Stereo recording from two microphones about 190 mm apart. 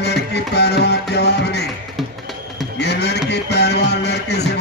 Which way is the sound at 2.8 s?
60° left (ahead or behind).